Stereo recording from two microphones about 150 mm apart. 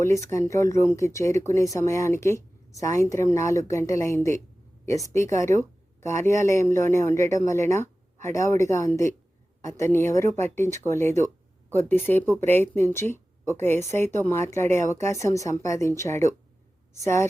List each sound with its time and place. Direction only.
0.3 s a woman's voice: 20° left (ahead or behind)